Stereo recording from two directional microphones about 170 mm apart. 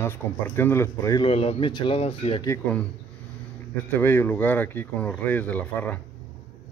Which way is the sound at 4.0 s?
10° left (ahead or behind).